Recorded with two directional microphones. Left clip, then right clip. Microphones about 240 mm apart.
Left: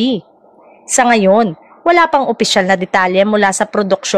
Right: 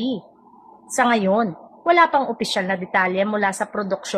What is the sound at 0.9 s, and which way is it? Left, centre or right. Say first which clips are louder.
A woman's voice: left 8 dB; left.